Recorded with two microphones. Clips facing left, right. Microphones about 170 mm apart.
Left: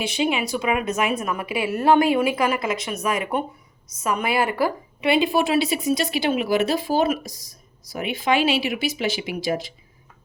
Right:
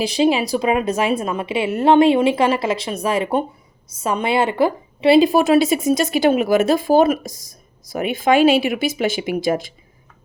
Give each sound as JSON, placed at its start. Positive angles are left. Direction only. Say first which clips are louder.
{"t": 0.0, "sound": "a woman's voice", "louder": "right 6 dB", "side_deg": -35}